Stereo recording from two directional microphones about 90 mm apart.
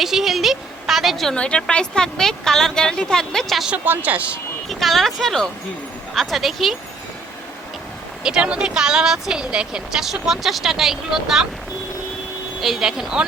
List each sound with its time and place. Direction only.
0.0 s a woman's voice: 5° right (ahead or behind)
3.7 s speech: 20° right (ahead or behind)
4.7 s a woman's voice: centre (ahead or behind)
8.2 s speech: 10° right (ahead or behind)
12.5 s a woman's voice: 5° right (ahead or behind)